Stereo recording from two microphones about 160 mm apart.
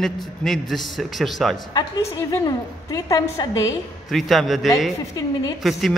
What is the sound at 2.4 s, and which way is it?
A woman's voice, 20° left (ahead or behind).